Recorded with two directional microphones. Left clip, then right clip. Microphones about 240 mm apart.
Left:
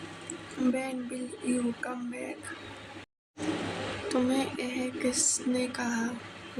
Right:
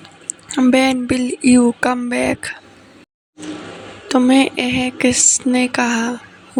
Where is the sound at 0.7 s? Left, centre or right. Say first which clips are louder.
Right 19 dB; right.